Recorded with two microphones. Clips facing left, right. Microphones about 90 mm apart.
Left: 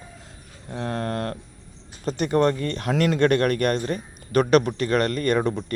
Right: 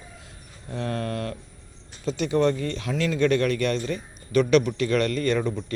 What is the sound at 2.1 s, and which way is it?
Speech, 50° left (ahead or behind).